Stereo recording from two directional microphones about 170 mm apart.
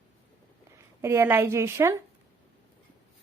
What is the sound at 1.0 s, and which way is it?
Speech, 15° right (ahead or behind).